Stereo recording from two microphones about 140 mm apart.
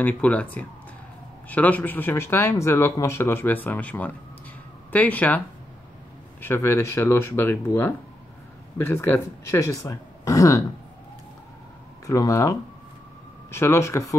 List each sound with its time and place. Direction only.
0.0 s speech: 10° left (ahead or behind)
6.4 s speech: 15° left (ahead or behind)
12.1 s speech: 20° left (ahead or behind)